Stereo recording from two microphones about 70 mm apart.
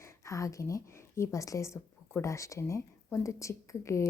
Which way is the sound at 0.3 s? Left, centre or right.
Left.